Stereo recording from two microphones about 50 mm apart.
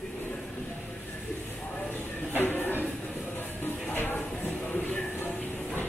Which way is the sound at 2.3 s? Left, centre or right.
Left.